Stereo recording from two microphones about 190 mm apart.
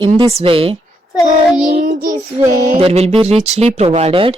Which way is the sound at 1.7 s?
50° right (ahead or behind).